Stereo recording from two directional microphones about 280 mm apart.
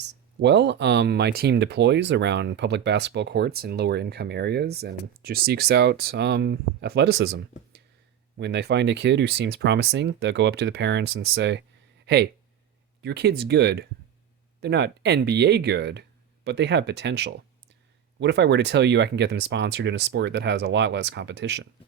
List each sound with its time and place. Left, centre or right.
0.0 s speech: right